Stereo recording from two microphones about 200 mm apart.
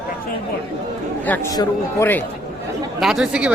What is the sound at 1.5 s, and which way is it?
Speech, 10° left (ahead or behind).